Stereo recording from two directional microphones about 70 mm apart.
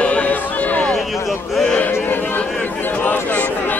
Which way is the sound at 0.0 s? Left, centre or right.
Centre.